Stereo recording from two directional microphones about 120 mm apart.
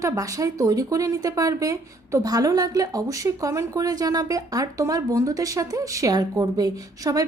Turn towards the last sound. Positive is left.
turn(degrees=-30)  # may be behind; listen again after turning